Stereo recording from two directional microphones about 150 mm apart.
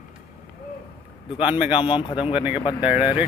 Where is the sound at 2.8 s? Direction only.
10° right (ahead or behind).